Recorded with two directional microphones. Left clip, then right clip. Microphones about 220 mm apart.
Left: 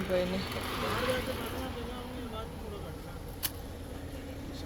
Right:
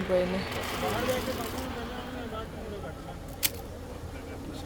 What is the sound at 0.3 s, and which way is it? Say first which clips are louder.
Speech: right 3 dB; 50° left (ahead or behind).